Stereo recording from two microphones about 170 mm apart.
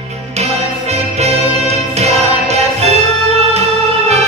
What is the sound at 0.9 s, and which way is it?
Music, 40° right (ahead or behind).